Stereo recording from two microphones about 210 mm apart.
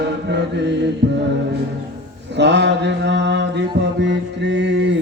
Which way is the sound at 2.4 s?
55° right (ahead or behind).